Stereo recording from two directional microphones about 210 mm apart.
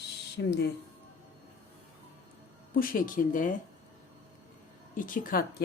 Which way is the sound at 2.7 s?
45° left (ahead or behind).